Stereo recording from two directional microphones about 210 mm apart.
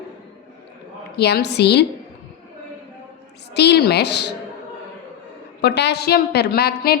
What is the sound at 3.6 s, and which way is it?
Speech, 50° left (ahead or behind).